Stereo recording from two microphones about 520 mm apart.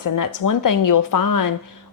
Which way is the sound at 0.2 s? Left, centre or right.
Left.